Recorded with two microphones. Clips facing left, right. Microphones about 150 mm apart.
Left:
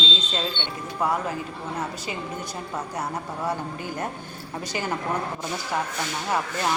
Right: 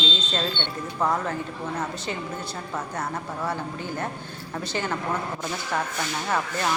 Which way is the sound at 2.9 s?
15° left (ahead or behind).